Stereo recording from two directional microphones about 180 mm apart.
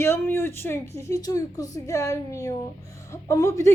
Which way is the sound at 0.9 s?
15° left (ahead or behind).